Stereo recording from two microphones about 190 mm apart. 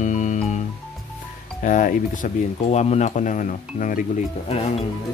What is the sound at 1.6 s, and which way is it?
Speech, 45° left (ahead or behind).